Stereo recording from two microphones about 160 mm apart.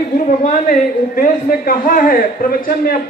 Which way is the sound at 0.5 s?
60° left (ahead or behind).